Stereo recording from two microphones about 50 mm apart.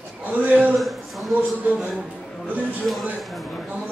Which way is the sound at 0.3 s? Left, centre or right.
Right.